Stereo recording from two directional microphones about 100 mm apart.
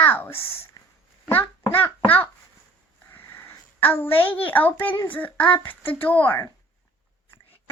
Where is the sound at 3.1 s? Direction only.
20° left (ahead or behind).